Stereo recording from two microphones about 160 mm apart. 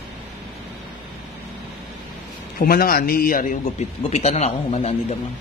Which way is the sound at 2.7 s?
65° left (ahead or behind).